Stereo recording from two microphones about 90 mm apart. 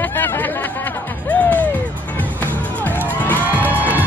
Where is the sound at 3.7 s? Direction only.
20° right (ahead or behind).